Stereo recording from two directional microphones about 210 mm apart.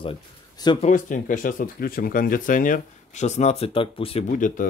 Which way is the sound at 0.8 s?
35° left (ahead or behind).